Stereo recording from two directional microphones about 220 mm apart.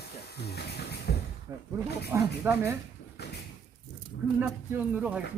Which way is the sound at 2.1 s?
10° right (ahead or behind).